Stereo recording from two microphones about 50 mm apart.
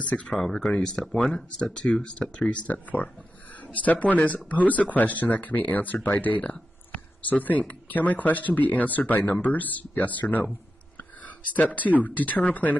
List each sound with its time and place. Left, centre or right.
0.3 s speech: centre
1.0 s speech: centre
1.3 s speech: centre; by 12.7 s left